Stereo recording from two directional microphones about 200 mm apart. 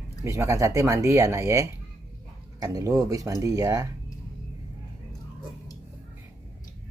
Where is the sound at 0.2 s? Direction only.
15° right (ahead or behind).